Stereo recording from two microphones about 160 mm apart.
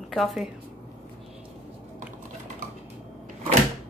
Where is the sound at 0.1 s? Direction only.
Centre (ahead or behind).